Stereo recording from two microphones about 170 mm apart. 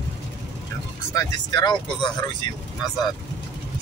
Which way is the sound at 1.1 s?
25° left (ahead or behind).